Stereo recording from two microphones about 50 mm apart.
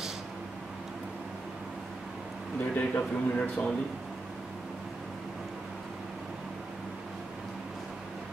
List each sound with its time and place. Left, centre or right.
2.7 s a man's voice: left